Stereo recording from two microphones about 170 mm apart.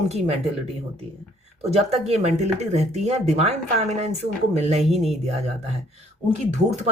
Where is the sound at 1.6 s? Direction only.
40° right (ahead or behind).